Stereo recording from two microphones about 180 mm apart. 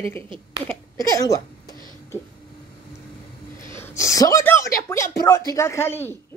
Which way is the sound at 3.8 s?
15° left (ahead or behind).